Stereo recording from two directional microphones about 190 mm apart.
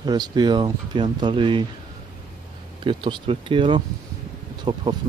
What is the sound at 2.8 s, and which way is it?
Speech, 25° right (ahead or behind).